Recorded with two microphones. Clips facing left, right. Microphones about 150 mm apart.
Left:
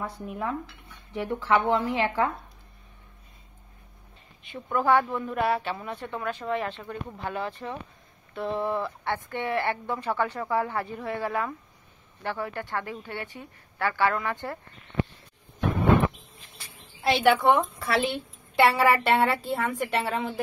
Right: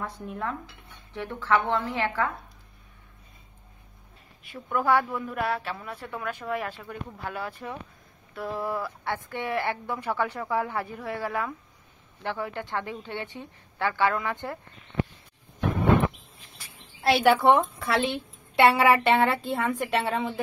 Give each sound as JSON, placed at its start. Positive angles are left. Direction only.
{"t": 0.0, "sound": "speech", "side_deg": 10}
{"t": 4.9, "sound": "a woman's voice", "side_deg": -5}
{"t": 17.1, "sound": "a woman's voice", "side_deg": -5}